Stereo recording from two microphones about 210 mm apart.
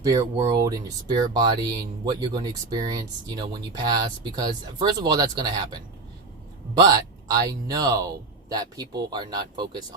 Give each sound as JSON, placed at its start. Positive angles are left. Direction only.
{"t": 0.0, "sound": "speech", "side_deg": -15}